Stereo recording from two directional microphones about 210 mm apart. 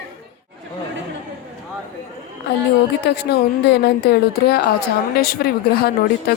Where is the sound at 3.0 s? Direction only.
50° left (ahead or behind).